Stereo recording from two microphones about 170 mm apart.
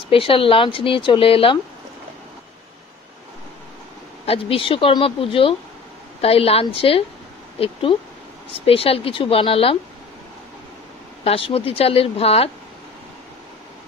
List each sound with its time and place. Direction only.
0.1 s speech: 30° left (ahead or behind)
4.3 s speech: 30° left (ahead or behind)
11.2 s speech: 35° left (ahead or behind)